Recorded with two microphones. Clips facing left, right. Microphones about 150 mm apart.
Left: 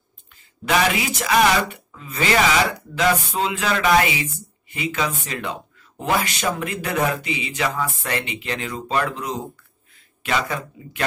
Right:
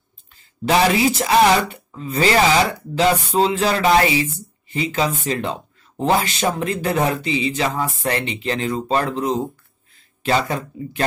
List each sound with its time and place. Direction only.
0.7 s speech: 30° right (ahead or behind)